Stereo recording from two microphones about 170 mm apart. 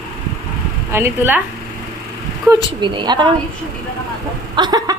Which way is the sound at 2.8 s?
25° right (ahead or behind).